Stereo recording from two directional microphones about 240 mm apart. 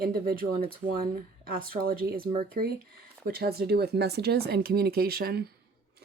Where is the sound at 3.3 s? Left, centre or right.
Right.